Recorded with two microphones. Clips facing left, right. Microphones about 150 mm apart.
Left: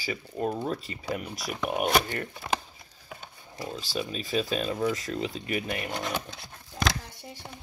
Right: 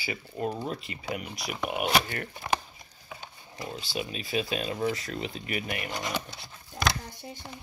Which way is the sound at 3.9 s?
40° left (ahead or behind).